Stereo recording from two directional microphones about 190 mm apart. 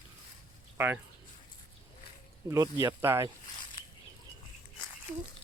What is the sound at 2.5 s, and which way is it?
Speech, 20° right (ahead or behind).